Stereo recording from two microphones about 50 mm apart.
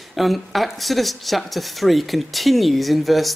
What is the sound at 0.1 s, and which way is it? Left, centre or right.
A man's voice, centre.